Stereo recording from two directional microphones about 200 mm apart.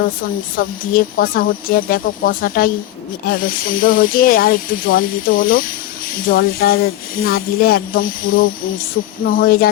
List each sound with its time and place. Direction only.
0.5 s speech: 45° left (ahead or behind)